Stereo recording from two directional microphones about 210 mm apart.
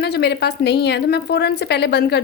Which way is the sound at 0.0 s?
50° left (ahead or behind).